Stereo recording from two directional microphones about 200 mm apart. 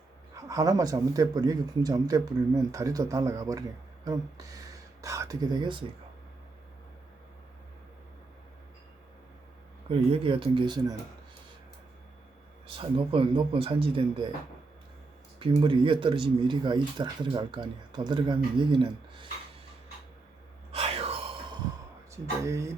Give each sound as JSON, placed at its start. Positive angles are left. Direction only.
{"t": 0.4, "sound": "speech", "side_deg": -15}
{"t": 9.9, "sound": "speech", "side_deg": -30}
{"t": 12.6, "sound": "speech", "side_deg": -25}
{"t": 15.4, "sound": "speech", "side_deg": -25}
{"t": 20.7, "sound": "whispering", "side_deg": -30}
{"t": 22.1, "sound": "speech", "side_deg": -15}